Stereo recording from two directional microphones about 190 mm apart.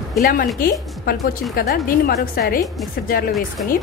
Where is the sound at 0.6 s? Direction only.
50° left (ahead or behind).